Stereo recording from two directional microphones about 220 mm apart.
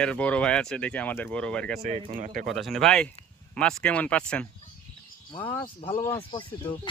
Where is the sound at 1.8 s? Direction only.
30° right (ahead or behind).